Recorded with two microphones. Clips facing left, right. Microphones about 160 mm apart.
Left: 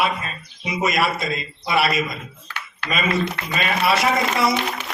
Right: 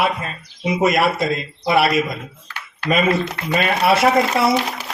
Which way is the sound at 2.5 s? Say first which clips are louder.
Right 7 dB; 45° right (ahead or behind).